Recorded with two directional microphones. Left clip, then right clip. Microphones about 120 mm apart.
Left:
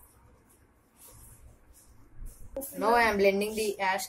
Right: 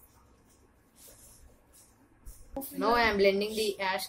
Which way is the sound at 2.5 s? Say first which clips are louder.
Left 2 dB; centre (ahead or behind).